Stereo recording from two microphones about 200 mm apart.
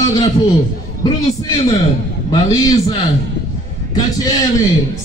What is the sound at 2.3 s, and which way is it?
Speech, 20° left (ahead or behind).